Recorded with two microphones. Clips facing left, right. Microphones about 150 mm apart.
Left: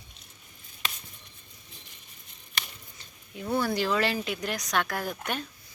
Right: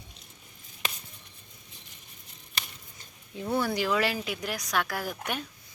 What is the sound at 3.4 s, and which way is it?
Speech, 10° right (ahead or behind).